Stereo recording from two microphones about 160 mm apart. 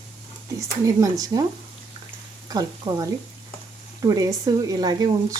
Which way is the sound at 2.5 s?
25° right (ahead or behind).